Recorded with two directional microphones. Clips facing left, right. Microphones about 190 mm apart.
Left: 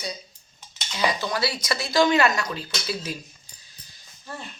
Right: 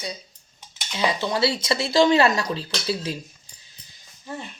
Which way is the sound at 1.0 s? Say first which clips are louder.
Right 3 dB; 25° right (ahead or behind).